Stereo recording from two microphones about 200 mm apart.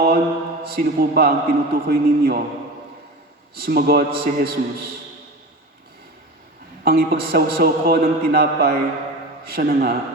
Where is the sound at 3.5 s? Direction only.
50° right (ahead or behind).